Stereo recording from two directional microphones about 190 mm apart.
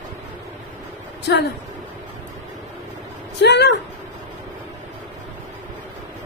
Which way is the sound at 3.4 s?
65° left (ahead or behind).